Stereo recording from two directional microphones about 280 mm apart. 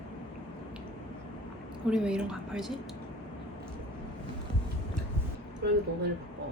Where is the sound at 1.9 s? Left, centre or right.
Centre.